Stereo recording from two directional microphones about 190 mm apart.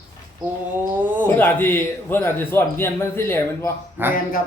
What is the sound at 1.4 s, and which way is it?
A man's voice, 10° left (ahead or behind).